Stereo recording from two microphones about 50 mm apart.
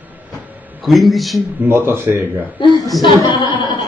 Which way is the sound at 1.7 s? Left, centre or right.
Right.